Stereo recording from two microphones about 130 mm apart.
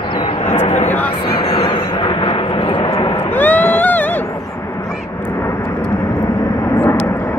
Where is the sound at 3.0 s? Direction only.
40° left (ahead or behind).